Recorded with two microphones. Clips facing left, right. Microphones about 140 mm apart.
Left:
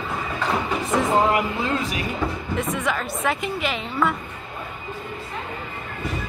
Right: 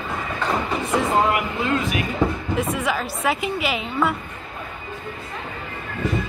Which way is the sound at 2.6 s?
5° right (ahead or behind).